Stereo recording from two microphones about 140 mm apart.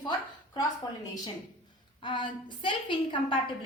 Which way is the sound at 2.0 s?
35° left (ahead or behind).